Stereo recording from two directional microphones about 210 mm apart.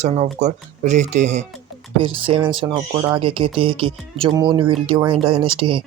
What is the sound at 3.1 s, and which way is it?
Speech, 25° right (ahead or behind).